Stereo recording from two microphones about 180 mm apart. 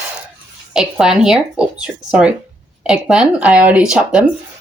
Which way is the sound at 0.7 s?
5° right (ahead or behind).